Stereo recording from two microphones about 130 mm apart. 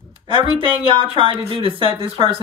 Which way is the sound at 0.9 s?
45° right (ahead or behind).